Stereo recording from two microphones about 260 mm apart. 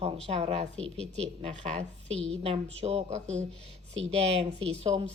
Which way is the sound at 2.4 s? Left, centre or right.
Right.